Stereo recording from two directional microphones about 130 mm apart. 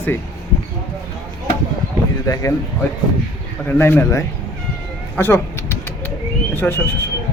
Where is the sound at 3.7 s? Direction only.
15° left (ahead or behind).